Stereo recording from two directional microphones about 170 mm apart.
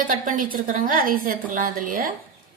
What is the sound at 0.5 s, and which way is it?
A woman's voice, 55° right (ahead or behind).